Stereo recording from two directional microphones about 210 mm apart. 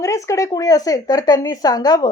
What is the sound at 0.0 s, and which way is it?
Speech, 15° left (ahead or behind).